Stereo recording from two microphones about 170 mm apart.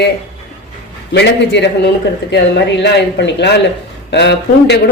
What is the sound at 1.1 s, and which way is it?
Speech, 90° left.